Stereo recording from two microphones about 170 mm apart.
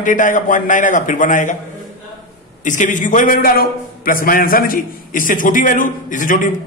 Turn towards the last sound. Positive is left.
turn(degrees=50)  # may be behind; listen again after turning